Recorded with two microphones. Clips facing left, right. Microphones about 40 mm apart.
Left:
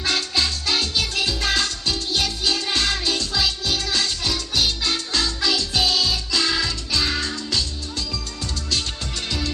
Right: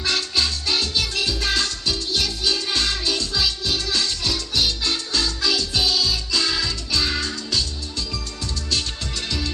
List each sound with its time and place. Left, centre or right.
0.0 s music: centre; by 6.4 s left
6.4 s music: centre